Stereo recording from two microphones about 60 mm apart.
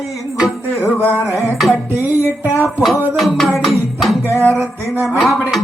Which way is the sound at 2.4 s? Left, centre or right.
Left.